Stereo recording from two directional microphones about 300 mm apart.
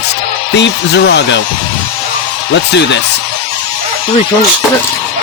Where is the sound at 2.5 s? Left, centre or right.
Left.